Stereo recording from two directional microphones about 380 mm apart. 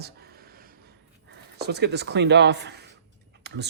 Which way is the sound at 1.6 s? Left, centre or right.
Right.